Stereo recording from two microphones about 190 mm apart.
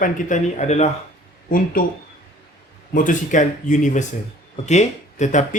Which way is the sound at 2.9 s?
45° left (ahead or behind).